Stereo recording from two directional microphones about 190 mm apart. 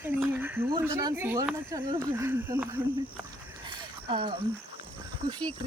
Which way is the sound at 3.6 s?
30° right (ahead or behind).